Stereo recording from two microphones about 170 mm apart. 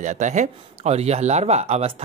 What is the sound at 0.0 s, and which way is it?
Speech, 45° right (ahead or behind).